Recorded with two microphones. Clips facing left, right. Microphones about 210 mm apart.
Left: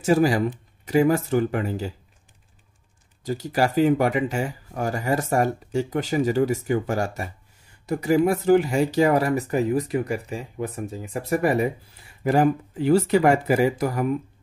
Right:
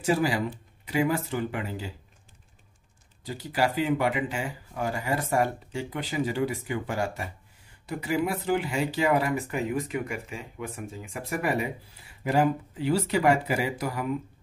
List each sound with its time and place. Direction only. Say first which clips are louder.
0.0 s speech: left 6 dB; 45° left (ahead or behind)
3.3 s speech: left 4 dB; 45° left (ahead or behind)